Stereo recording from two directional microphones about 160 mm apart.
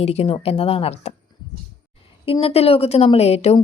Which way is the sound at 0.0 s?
40° left (ahead or behind).